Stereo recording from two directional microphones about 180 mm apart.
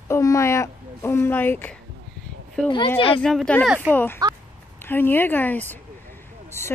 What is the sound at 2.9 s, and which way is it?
Speech, 30° left (ahead or behind).